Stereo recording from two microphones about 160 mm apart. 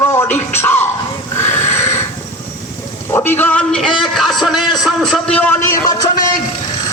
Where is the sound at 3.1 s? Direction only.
15° left (ahead or behind).